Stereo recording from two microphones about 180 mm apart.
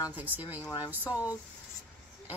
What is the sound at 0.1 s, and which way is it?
Speech, 10° right (ahead or behind).